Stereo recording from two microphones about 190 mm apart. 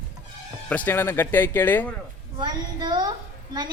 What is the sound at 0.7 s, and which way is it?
Speech, 10° left (ahead or behind).